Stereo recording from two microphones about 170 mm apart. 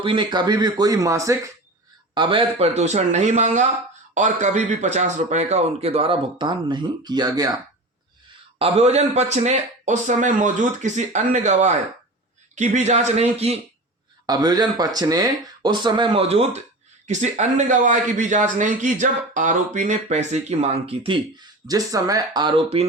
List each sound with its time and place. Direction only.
0.0 s speech: 30° right (ahead or behind)
2.1 s speech: 30° right (ahead or behind)
8.5 s a man's voice: 35° right (ahead or behind)
14.3 s a man's voice: 25° right (ahead or behind)
21.7 s speech: 20° right (ahead or behind)